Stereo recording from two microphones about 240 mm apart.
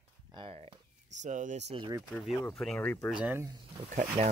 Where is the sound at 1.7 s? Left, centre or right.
Centre.